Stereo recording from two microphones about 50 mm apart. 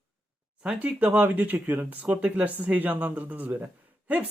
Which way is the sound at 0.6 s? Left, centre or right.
Right.